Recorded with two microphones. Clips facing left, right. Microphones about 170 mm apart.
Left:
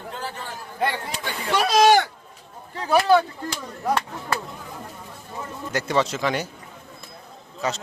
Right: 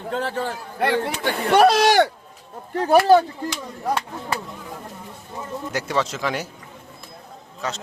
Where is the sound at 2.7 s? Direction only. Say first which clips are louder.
Right 4 dB; 50° right (ahead or behind).